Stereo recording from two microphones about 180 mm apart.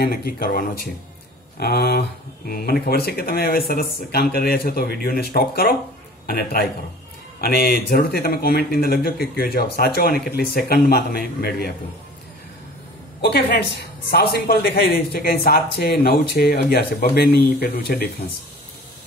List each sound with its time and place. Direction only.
0.0 s a woman's voice: 55° left (ahead or behind)
13.2 s a woman's voice: 60° left (ahead or behind)